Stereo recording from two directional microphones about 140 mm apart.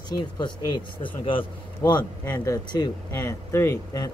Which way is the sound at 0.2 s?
35° left (ahead or behind).